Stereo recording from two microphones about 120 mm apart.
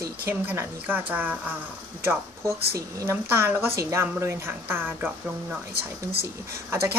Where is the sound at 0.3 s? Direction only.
15° right (ahead or behind).